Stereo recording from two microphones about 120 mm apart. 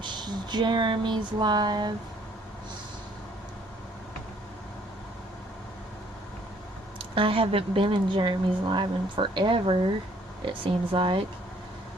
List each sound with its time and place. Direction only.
0.0 s speech: 40° right (ahead or behind)
7.2 s speech: 45° right (ahead or behind)